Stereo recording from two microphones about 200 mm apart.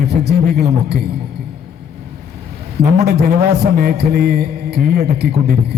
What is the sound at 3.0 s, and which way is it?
Speech, 50° right (ahead or behind).